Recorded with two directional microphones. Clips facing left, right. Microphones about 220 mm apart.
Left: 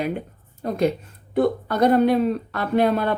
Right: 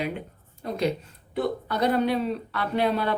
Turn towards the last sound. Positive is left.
turn(degrees=50)  # may be behind; listen again after turning